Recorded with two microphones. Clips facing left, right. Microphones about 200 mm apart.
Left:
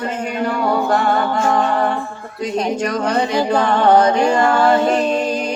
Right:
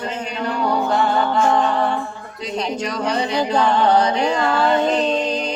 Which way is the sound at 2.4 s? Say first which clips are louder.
Left 5 dB; 50° left (ahead or behind).